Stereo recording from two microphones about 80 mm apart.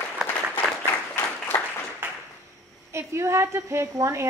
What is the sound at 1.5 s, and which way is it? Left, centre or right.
Applause, centre.